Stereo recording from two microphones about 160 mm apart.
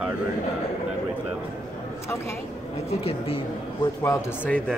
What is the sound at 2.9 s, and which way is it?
Speech, 35° left (ahead or behind).